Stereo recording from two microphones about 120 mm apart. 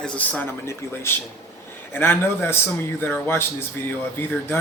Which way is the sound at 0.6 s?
20° left (ahead or behind).